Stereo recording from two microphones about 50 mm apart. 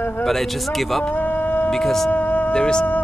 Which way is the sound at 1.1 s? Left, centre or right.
Left.